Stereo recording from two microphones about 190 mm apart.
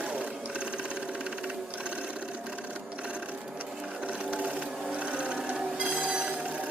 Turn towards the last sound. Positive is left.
turn(degrees=-5)  # may be behind; listen again after turning